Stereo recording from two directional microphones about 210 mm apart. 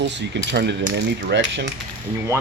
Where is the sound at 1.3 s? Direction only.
55° right (ahead or behind).